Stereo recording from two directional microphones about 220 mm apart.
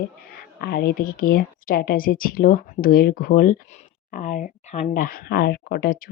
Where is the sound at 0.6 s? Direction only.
45° left (ahead or behind).